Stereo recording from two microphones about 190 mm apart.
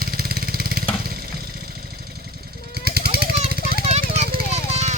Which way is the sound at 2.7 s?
55° right (ahead or behind).